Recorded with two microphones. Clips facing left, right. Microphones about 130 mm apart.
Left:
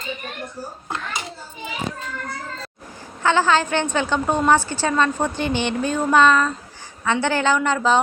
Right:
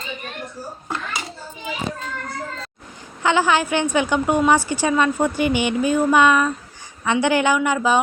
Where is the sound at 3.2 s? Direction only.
15° right (ahead or behind).